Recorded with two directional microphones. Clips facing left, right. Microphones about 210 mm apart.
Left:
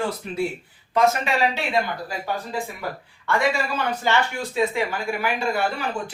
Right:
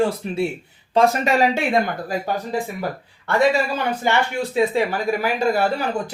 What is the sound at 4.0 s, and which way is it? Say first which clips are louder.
Speech: right 2 dB; 15° right (ahead or behind).